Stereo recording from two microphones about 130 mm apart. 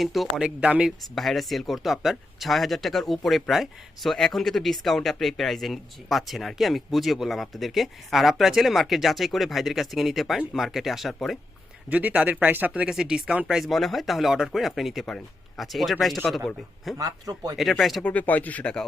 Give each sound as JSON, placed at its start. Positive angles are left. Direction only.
{"t": 0.0, "sound": "speech", "side_deg": 0}
{"t": 11.9, "sound": "speech", "side_deg": -10}
{"t": 17.0, "sound": "a man's voice", "side_deg": -25}
{"t": 17.6, "sound": "speech", "side_deg": 0}
{"t": 18.0, "sound": "speech", "side_deg": 10}